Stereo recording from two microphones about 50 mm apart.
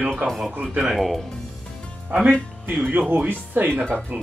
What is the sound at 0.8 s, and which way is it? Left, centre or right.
Speech, centre.